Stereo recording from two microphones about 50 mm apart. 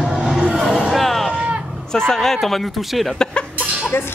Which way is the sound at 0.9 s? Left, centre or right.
Centre.